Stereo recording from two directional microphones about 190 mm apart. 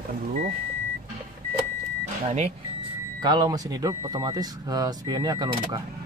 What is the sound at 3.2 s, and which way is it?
Speech, 20° right (ahead or behind).